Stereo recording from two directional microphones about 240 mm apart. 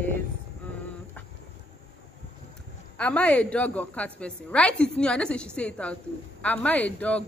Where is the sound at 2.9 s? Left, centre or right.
Centre.